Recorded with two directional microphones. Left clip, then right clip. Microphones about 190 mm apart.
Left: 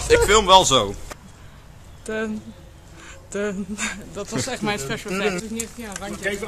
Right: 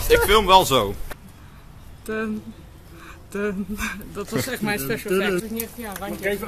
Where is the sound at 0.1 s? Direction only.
10° left (ahead or behind).